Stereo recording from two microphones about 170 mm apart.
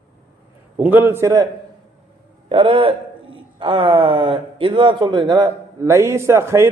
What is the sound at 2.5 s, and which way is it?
A man's voice, 30° right (ahead or behind).